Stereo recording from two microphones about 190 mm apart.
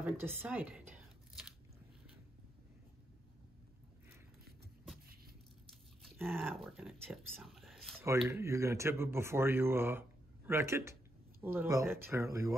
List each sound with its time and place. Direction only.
0.0 s speech: 10° right (ahead or behind)
6.1 s speech: 10° right (ahead or behind)
6.4 s speech: centre (ahead or behind)
8.3 s speech: 15° right (ahead or behind)